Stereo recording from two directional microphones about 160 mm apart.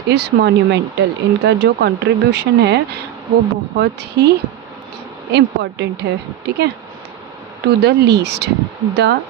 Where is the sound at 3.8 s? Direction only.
90° right.